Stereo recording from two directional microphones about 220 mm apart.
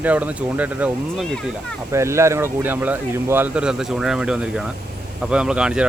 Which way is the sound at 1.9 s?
10° right (ahead or behind).